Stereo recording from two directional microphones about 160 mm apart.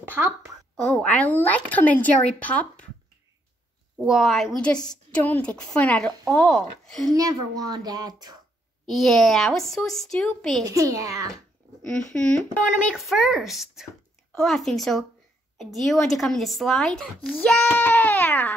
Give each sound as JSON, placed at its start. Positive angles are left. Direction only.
{"t": 0.1, "sound": "speech", "side_deg": -15}
{"t": 0.7, "sound": "speech", "side_deg": 5}
{"t": 4.0, "sound": "speech", "side_deg": 0}
{"t": 7.2, "sound": "a woman's voice", "side_deg": -20}
{"t": 8.8, "sound": "speech", "side_deg": 0}
{"t": 10.6, "sound": "a woman's voice", "side_deg": -20}
{"t": 12.1, "sound": "speech", "side_deg": 5}